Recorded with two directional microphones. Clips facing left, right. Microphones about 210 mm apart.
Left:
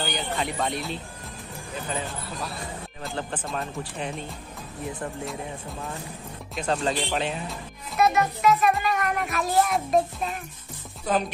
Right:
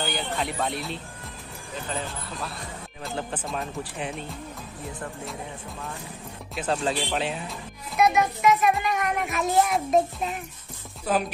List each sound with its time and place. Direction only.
0.0 s speech: centre (ahead or behind)
3.0 s speech: centre (ahead or behind)
6.5 s speech: 5° right (ahead or behind)
8.0 s a child's voice: 15° right (ahead or behind)
11.1 s speech: 5° right (ahead or behind)